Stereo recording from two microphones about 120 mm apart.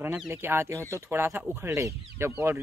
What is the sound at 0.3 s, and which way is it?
Speech, 20° right (ahead or behind).